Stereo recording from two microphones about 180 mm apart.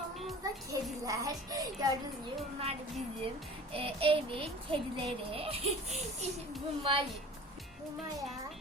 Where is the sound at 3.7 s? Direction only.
30° right (ahead or behind).